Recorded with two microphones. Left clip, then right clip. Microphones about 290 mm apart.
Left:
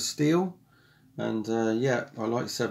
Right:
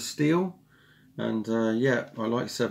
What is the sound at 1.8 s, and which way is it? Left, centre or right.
Speech, centre.